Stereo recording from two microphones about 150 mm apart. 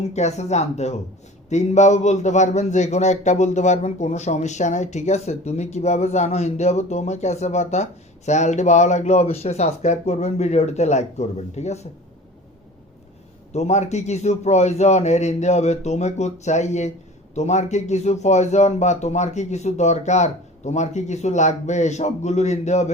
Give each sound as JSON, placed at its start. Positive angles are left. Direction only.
{"t": 0.1, "sound": "a man's voice", "side_deg": 50}
{"t": 13.5, "sound": "a man's voice", "side_deg": 50}